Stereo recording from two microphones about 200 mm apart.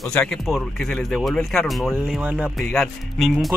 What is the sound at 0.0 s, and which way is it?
Speech, 5° left (ahead or behind).